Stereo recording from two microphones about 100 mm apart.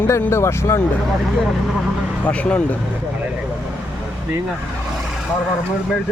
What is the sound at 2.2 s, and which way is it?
Speech, 15° left (ahead or behind).